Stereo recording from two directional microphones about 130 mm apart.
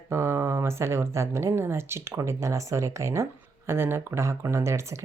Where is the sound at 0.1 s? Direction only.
20° right (ahead or behind).